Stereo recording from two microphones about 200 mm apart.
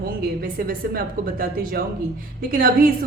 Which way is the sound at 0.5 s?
45° right (ahead or behind).